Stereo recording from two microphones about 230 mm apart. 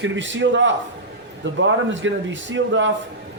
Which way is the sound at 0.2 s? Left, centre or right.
Right.